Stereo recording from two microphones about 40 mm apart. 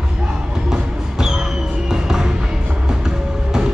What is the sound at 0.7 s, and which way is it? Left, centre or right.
Music, centre.